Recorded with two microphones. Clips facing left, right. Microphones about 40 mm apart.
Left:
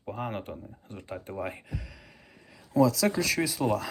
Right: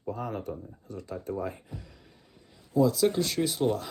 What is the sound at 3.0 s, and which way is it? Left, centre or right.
Speech, left.